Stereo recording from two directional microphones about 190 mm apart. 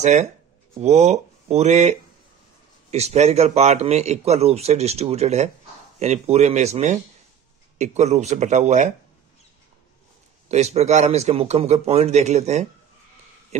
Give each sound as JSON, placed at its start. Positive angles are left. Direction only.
{"t": 0.0, "sound": "a man's voice", "side_deg": -35}
{"t": 10.5, "sound": "a man's voice", "side_deg": -35}